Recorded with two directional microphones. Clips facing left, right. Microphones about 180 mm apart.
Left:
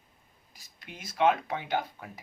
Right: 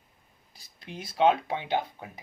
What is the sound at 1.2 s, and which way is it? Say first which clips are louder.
Speech: right 2 dB; 30° right (ahead or behind).